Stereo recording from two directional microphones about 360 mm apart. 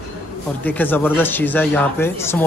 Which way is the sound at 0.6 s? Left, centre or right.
Centre.